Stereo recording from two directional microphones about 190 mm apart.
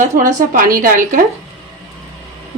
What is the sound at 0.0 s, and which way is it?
A woman's voice, 45° right (ahead or behind).